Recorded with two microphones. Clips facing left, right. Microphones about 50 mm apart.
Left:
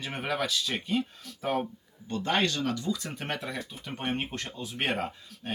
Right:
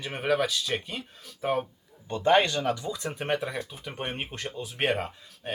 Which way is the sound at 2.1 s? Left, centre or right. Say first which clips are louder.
Right 6 dB; right.